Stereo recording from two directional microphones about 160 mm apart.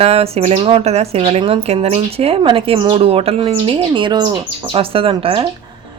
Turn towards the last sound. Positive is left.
turn(degrees=-35)  # may be behind; listen again after turning